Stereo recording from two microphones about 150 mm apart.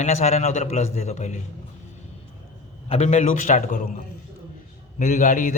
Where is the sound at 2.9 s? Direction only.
45° left (ahead or behind).